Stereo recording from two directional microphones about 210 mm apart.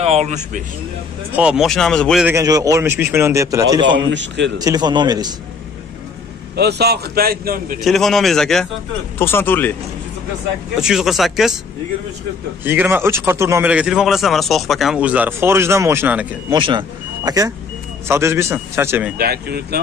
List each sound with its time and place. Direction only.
0.0 s speech: 30° right (ahead or behind)
1.3 s speech: 5° right (ahead or behind)
2.2 s a man's voice: 15° right (ahead or behind)
4.1 s a man's voice: 60° right (ahead or behind)
4.6 s a man's voice: 20° right (ahead or behind)
6.5 s a man's voice: 50° right (ahead or behind)
7.8 s speech: centre (ahead or behind)
10.8 s speech: centre (ahead or behind)
12.6 s a man's voice: 10° right (ahead or behind)
16.4 s a man's voice: 25° right (ahead or behind)
19.1 s a man's voice: 50° right (ahead or behind)